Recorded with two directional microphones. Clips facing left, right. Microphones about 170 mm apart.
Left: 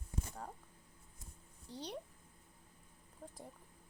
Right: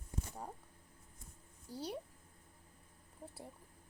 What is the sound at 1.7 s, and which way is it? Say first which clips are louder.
Speech: right 3 dB; 10° right (ahead or behind).